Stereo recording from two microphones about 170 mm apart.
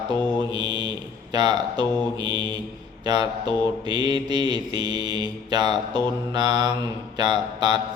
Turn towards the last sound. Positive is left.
turn(degrees=-25)  # may be behind; listen again after turning